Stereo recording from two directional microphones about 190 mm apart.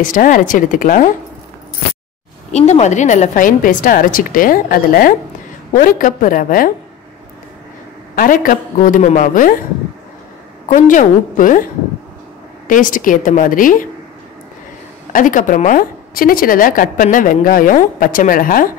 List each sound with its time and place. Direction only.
0.0 s a woman's voice: 45° left (ahead or behind)
2.5 s a woman's voice: 35° left (ahead or behind)
8.2 s a woman's voice: 45° left (ahead or behind)
10.7 s a woman's voice: 40° left (ahead or behind)
12.6 s a woman's voice: 45° left (ahead or behind)
15.1 s a woman's voice: 45° left (ahead or behind)